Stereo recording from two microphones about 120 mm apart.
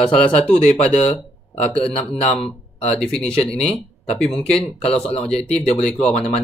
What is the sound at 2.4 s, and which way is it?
Speech, 55° left (ahead or behind).